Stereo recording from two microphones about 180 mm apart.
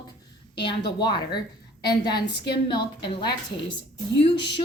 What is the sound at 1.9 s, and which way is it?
Speech, 25° left (ahead or behind).